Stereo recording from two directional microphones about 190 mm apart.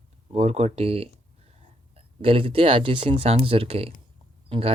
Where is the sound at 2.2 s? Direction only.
30° right (ahead or behind).